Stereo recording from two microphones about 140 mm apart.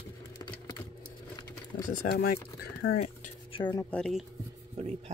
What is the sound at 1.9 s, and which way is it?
Speech, 80° left.